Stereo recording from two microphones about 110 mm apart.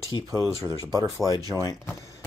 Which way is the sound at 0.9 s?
35° right (ahead or behind).